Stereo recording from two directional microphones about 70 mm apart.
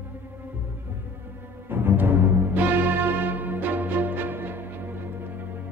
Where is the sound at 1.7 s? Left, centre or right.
Right.